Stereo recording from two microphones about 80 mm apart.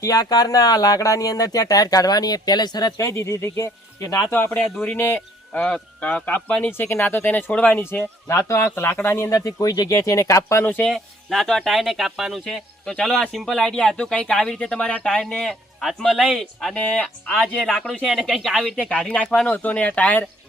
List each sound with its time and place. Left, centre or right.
0.0 s speech: left
3.0 s speech: left
4.3 s speech: left
5.6 s speech: centre
6.7 s speech: left
8.6 s speech: left
9.3 s speech: left
10.0 s speech: left
10.8 s speech: centre
17.7 s speech: centre
19.0 s speech: centre